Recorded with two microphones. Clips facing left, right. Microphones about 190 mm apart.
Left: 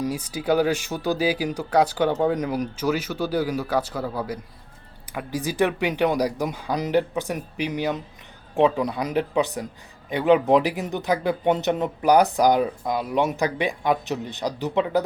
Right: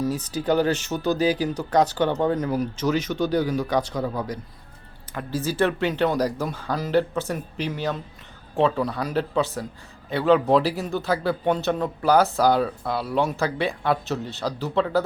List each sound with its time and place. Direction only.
0.1 s speech: 10° left (ahead or behind)